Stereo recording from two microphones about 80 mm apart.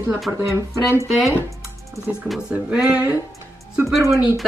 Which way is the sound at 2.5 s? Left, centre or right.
Centre.